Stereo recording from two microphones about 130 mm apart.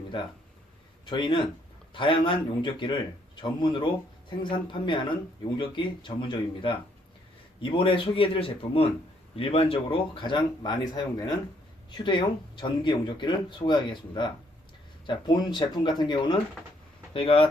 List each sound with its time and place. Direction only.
1.0 s speech: 35° left (ahead or behind)